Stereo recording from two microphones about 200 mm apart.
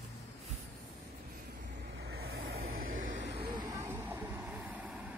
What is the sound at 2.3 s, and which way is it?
Vehicle, 90° right.